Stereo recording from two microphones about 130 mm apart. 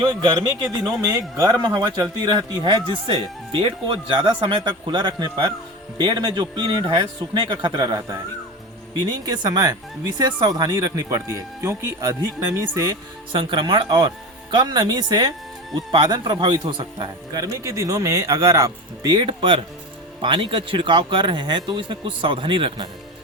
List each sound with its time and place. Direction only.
0.0 s speech: 35° right (ahead or behind)
0.8 s speech: centre (ahead or behind)
1.0 s a man's voice: 30° right (ahead or behind)
13.3 s a man's voice: 35° right (ahead or behind)